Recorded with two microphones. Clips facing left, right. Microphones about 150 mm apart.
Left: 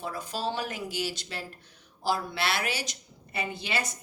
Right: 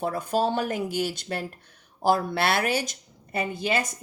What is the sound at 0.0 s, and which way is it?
Speech, 55° right (ahead or behind).